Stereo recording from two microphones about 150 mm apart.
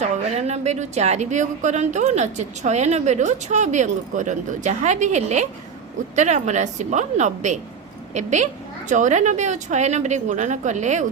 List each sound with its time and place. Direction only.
0.0 s a woman's voice: 45° right (ahead or behind)